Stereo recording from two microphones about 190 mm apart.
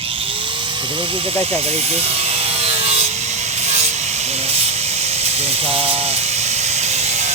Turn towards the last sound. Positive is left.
turn(degrees=-35)  # may be behind; listen again after turning